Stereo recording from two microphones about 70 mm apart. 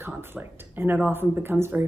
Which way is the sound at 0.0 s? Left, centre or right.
Right.